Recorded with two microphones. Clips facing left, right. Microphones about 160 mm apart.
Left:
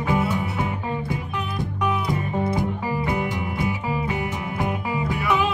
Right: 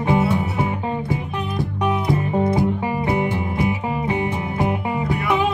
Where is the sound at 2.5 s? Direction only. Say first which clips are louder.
Right 4 dB; 25° right (ahead or behind).